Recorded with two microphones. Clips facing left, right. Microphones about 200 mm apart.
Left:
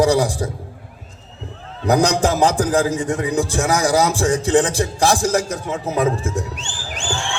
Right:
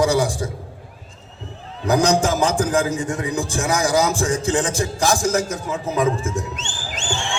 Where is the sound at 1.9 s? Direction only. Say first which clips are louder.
Left 1 dB; 35° left (ahead or behind).